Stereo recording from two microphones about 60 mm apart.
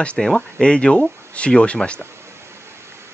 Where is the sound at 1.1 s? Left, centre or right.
Right.